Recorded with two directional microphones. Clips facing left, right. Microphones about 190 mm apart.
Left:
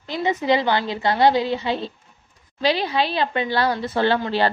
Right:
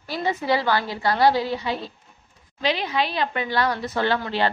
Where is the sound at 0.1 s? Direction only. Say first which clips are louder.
Left 3 dB; 20° left (ahead or behind).